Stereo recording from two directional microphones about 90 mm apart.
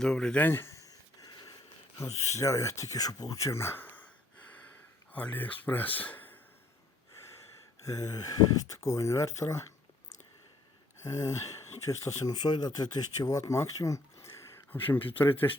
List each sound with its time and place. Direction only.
0.0 s speech: 5° left (ahead or behind)
0.4 s a sound: 30° left (ahead or behind); by 1.5 s 45° left (ahead or behind)
2.0 s speech: 35° left (ahead or behind); by 4.1 s 20° left (ahead or behind)
5.1 s speech: 20° left (ahead or behind)
6.0 s a sound: 20° left (ahead or behind)
7.9 s speech: 40° left (ahead or behind)
11.0 s speech: 35° left (ahead or behind)
14.7 s speech: 20° left (ahead or behind)